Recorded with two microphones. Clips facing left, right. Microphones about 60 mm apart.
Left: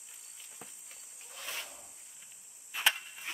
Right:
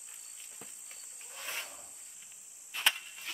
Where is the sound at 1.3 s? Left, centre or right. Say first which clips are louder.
Right 1 dB; centre.